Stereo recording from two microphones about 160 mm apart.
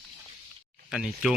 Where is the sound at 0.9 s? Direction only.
Centre (ahead or behind).